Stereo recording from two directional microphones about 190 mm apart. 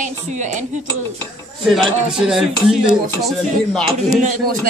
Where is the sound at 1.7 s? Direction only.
Centre (ahead or behind).